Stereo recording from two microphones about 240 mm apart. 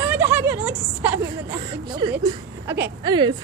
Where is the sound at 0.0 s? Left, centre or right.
Centre.